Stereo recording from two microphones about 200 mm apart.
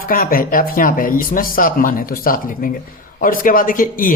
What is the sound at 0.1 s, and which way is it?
Speech, 45° left (ahead or behind).